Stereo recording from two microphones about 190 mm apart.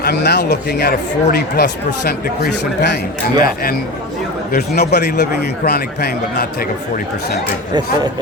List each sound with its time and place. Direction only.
0.0 s a man's voice: 60° left (ahead or behind)